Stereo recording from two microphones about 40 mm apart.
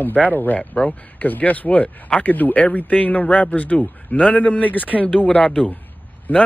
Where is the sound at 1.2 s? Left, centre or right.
Left.